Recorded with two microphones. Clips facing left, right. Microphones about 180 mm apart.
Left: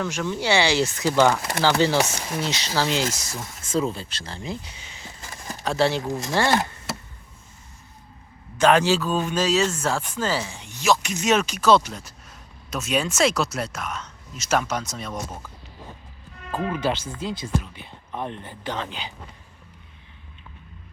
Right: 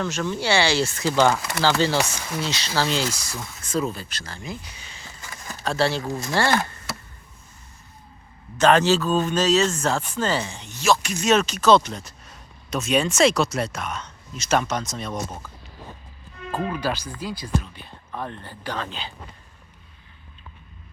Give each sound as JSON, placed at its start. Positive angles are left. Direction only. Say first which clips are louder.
{"t": 0.0, "sound": "speech", "louder": "even", "side_deg": 10}
{"t": 8.5, "sound": "speech", "louder": "right 1 dB", "side_deg": 10}
{"t": 16.6, "sound": "speech", "louder": "left 4 dB", "side_deg": 20}